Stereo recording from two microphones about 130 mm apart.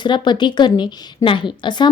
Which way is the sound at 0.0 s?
35° left (ahead or behind).